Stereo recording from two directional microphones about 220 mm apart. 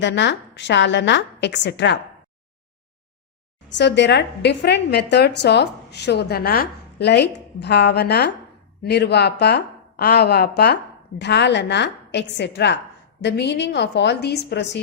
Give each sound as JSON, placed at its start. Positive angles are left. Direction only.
{"t": 0.0, "sound": "speech", "side_deg": 55}
{"t": 3.8, "sound": "speech", "side_deg": 55}